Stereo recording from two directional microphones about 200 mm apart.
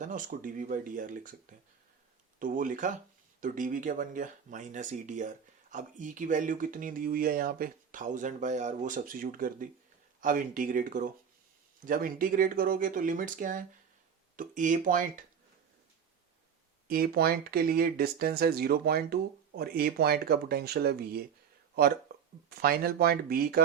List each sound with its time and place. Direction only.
0.0 s speech: 40° right (ahead or behind)
16.9 s speech: 50° right (ahead or behind)
22.1 s a sound: 50° right (ahead or behind)
22.4 s speech: 50° right (ahead or behind)